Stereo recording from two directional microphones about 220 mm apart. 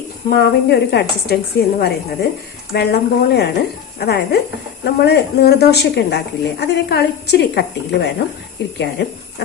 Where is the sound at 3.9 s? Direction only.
45° left (ahead or behind).